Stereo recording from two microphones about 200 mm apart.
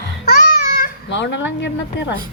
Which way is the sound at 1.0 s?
60° left (ahead or behind).